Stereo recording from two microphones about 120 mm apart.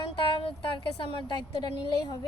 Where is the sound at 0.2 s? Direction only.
45° left (ahead or behind).